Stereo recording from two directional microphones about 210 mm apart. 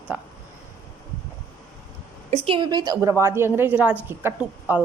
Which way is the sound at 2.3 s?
25° right (ahead or behind).